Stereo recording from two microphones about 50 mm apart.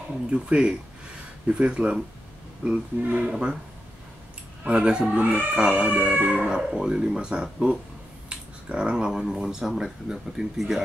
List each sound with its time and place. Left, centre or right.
0.1 s speech: centre
4.6 s speech: right
4.9 s speech: centre
5.2 s cat: right
6.2 s speech: centre
8.3 s a sound: centre
9.3 s speech: centre